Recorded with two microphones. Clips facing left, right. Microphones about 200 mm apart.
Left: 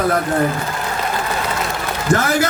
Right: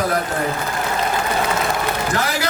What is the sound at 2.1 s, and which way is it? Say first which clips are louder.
Speech: left 4 dB; 50° left (ahead or behind).